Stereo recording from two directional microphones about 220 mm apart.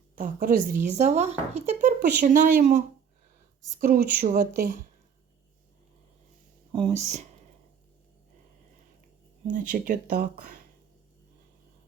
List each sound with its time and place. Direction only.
0.2 s speech: 40° right (ahead or behind)
6.7 s speech: 30° right (ahead or behind)
9.5 s speech: 35° right (ahead or behind)